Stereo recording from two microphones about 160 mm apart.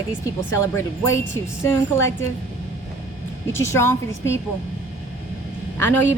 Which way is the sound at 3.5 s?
15° left (ahead or behind).